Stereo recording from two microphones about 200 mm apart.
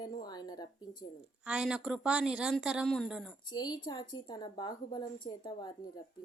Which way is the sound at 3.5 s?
20° left (ahead or behind).